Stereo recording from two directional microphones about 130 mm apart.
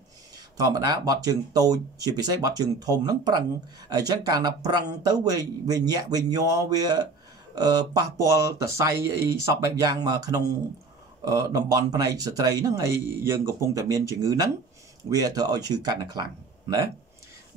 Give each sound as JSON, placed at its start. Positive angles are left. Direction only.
{"t": 0.6, "sound": "speech", "side_deg": -30}